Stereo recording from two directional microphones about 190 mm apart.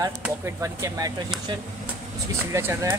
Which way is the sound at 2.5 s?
15° right (ahead or behind).